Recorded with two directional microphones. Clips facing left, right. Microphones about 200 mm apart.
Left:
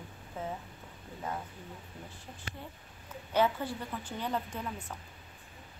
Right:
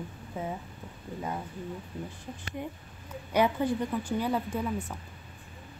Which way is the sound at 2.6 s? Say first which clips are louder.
Right 9 dB; 15° right (ahead or behind).